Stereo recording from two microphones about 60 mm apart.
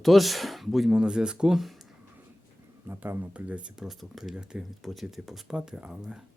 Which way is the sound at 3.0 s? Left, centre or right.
Right.